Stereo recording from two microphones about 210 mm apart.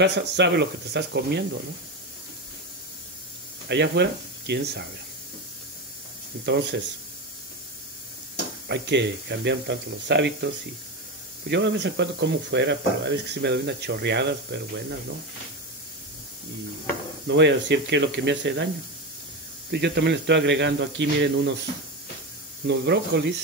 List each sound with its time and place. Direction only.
0.0 s speech: 55° right (ahead or behind)
3.6 s speech: 55° right (ahead or behind)
6.4 s speech: 55° right (ahead or behind)
8.6 s speech: 55° right (ahead or behind)
17.3 s speech: 60° right (ahead or behind)
19.7 s speech: 55° right (ahead or behind)
22.7 s speech: 55° right (ahead or behind)